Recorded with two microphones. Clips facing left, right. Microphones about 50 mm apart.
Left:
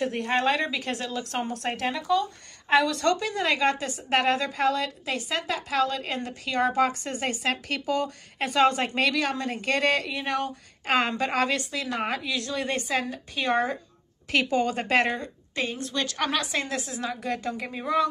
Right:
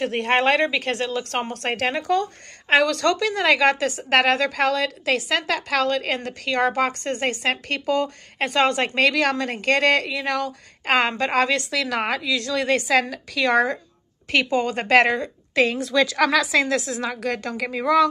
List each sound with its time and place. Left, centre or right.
0.0 s a woman's voice: right
11.6 s a woman's voice: right
13.0 s a woman's voice: right
14.3 s a woman's voice: right